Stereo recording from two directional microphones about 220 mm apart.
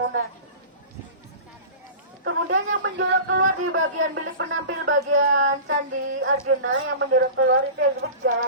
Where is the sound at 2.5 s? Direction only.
55° right (ahead or behind).